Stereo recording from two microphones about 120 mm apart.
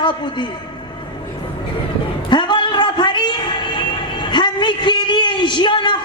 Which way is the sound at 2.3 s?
40° left (ahead or behind).